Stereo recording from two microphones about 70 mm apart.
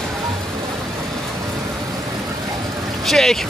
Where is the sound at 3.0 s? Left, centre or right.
Centre.